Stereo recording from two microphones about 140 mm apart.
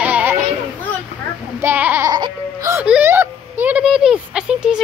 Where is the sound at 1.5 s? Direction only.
15° right (ahead or behind).